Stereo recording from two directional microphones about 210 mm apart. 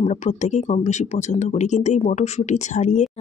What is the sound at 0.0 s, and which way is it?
Speech, 30° left (ahead or behind).